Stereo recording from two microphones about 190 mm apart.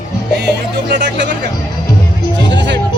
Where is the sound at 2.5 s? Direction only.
65° right (ahead or behind).